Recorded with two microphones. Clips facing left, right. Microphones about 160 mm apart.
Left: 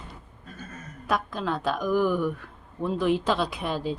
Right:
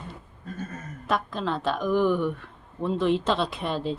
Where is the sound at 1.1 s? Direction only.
Centre (ahead or behind).